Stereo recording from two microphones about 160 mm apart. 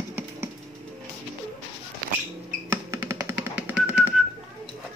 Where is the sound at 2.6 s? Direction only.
15° right (ahead or behind).